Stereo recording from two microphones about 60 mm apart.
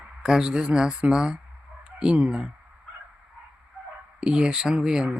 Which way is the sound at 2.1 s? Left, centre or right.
Centre.